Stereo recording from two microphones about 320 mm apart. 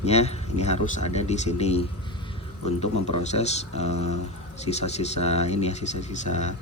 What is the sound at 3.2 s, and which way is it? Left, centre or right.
Speech, left.